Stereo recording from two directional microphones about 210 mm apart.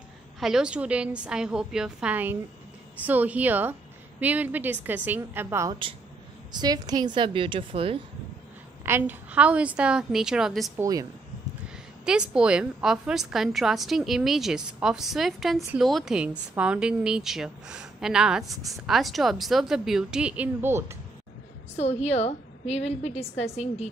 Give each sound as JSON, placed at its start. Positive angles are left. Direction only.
{"t": 0.4, "sound": "a woman's voice", "side_deg": -5}
{"t": 8.8, "sound": "a woman's voice", "side_deg": -10}
{"t": 10.8, "sound": "a woman's voice", "side_deg": -15}
{"t": 12.0, "sound": "a woman's voice", "side_deg": -5}
{"t": 18.5, "sound": "a woman's voice", "side_deg": -15}
{"t": 18.9, "sound": "a woman's voice", "side_deg": 0}
{"t": 21.7, "sound": "a woman's voice", "side_deg": 30}